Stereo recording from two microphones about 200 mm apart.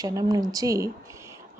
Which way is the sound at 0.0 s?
20° right (ahead or behind).